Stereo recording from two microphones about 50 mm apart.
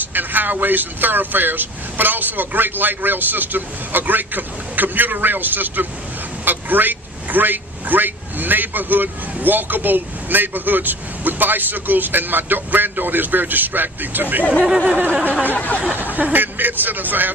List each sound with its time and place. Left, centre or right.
0.1 s a man's voice: right
14.5 s speech: centre
15.5 s speech: left
16.2 s a man's voice: right